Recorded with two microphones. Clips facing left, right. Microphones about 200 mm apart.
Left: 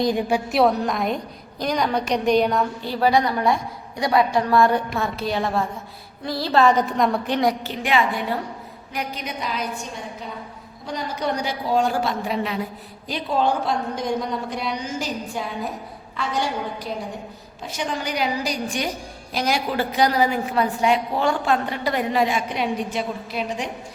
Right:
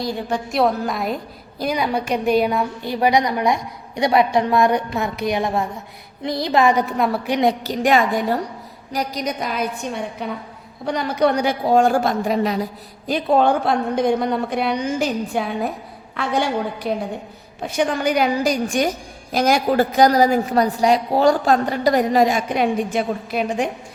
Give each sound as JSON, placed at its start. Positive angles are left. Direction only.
{"t": 0.0, "sound": "a woman's voice", "side_deg": 15}
{"t": 7.6, "sound": "a woman's voice", "side_deg": -40}
{"t": 13.1, "sound": "a woman's voice", "side_deg": -55}